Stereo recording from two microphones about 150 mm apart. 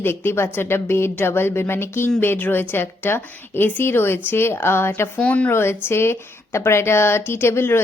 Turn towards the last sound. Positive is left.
turn(degrees=15)  # may be behind; listen again after turning